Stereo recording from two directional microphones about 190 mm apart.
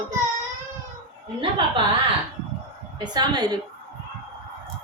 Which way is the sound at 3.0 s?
20° right (ahead or behind).